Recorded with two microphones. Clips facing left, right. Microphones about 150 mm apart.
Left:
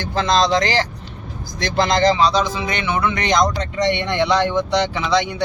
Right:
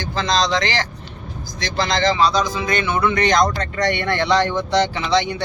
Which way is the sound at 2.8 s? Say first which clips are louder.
Right 2 dB; 15° left (ahead or behind).